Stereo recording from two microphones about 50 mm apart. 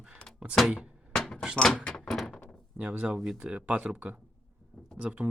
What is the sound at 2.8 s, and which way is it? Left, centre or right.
Speech, right.